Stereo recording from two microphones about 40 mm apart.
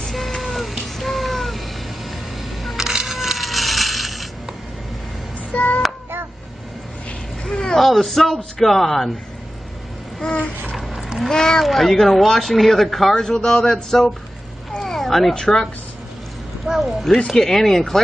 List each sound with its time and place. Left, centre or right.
0.0 s a sound: centre
5.5 s child singing: left
7.4 s cat: centre
7.8 s speech: centre
10.2 s babbling: centre
11.1 s speech: centre
13.1 s a man's voice: centre
14.8 s cat: centre
15.3 s a man's voice: centre
16.8 s speech: centre